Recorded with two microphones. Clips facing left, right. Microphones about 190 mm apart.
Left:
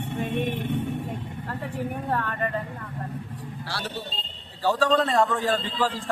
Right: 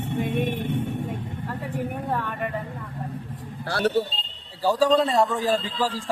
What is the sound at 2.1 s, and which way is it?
Speech, 10° right (ahead or behind).